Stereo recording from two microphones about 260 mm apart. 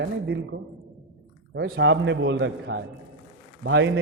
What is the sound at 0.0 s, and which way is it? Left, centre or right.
Speech, right.